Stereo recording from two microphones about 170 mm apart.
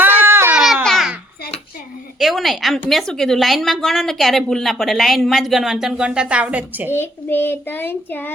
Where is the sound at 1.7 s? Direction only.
55° left (ahead or behind).